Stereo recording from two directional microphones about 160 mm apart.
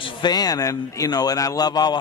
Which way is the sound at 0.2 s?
25° left (ahead or behind).